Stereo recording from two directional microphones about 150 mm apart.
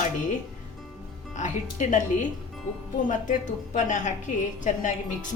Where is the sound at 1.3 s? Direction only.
55° left (ahead or behind).